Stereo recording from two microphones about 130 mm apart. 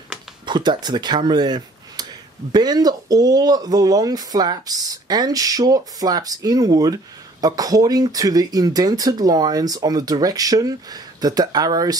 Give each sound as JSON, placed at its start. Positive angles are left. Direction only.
{"t": 0.5, "sound": "speech", "side_deg": -35}